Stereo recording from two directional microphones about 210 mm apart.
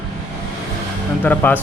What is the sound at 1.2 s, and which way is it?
Speech, 10° left (ahead or behind).